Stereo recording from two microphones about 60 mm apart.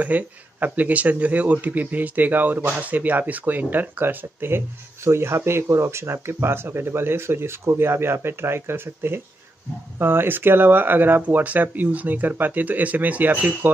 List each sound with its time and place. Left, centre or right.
0.0 s speech: right